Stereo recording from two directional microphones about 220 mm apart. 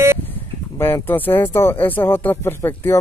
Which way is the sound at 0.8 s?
10° left (ahead or behind).